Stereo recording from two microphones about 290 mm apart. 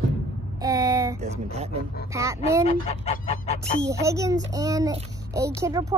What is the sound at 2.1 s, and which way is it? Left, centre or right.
Speech, centre.